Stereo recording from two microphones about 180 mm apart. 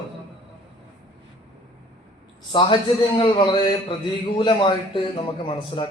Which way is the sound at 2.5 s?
25° left (ahead or behind).